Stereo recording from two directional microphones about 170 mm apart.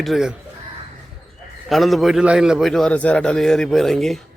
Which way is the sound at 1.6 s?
Centre (ahead or behind).